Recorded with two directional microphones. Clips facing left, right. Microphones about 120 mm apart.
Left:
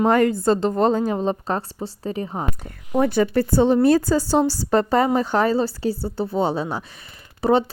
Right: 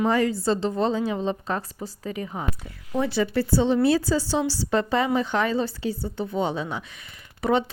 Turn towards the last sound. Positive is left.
turn(degrees=35)  # may be behind; listen again after turning